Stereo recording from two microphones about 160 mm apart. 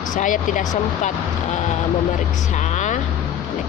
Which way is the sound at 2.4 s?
50° left (ahead or behind).